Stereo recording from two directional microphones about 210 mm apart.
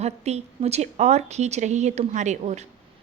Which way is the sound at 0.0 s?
30° right (ahead or behind).